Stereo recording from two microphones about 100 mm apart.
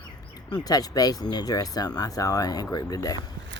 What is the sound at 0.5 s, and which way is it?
Speech, 40° left (ahead or behind).